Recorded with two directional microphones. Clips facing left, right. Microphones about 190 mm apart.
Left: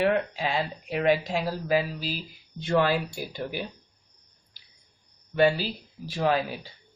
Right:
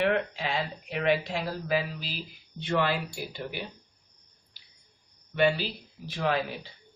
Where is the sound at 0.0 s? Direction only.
40° left (ahead or behind).